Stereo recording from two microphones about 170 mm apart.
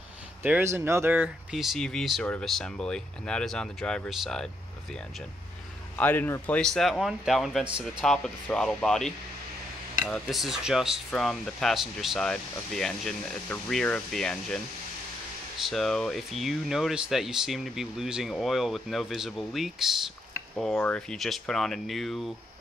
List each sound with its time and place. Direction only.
0.4 s speech: 10° right (ahead or behind)
5.9 s speech: 10° left (ahead or behind)
15.7 s speech: centre (ahead or behind)